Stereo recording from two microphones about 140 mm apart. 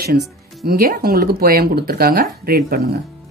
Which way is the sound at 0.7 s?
90° right.